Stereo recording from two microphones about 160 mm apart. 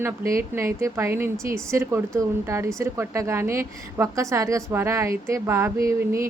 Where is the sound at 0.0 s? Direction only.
15° right (ahead or behind).